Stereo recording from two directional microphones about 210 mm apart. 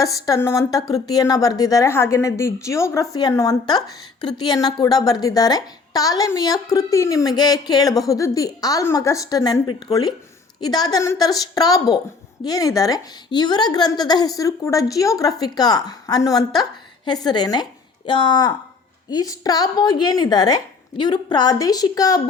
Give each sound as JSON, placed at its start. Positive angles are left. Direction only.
{"t": 0.0, "sound": "a woman's voice", "side_deg": 15}